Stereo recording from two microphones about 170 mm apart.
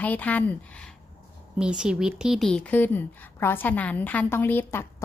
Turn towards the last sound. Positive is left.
turn(degrees=10)  # may be behind; listen again after turning